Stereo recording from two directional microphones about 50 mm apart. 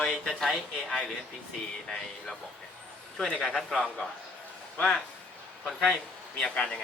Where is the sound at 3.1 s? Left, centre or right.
Centre.